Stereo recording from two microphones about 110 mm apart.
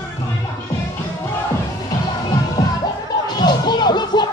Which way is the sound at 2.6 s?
35° left (ahead or behind).